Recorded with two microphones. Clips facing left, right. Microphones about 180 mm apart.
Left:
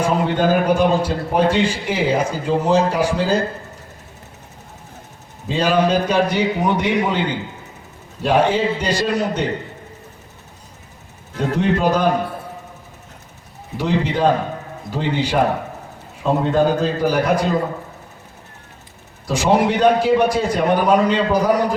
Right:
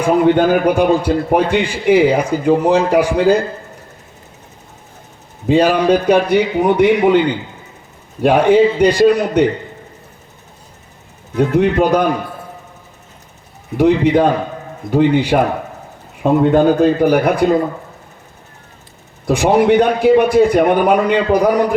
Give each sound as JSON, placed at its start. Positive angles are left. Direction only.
{"t": 0.0, "sound": "a man's voice", "side_deg": -60}
{"t": 5.5, "sound": "a man's voice", "side_deg": -60}
{"t": 8.2, "sound": "a man's voice", "side_deg": -60}
{"t": 11.3, "sound": "a man's voice", "side_deg": -60}
{"t": 13.7, "sound": "a man's voice", "side_deg": -60}
{"t": 19.3, "sound": "a man's voice", "side_deg": -60}